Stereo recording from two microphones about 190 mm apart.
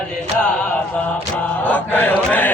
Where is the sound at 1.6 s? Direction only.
10° left (ahead or behind).